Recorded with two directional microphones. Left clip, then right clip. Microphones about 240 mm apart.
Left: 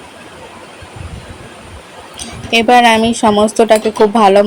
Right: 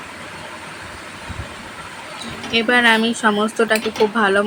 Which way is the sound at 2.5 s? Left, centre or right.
Centre.